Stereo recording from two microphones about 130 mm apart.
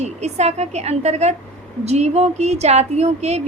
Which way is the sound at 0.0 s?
55° right (ahead or behind).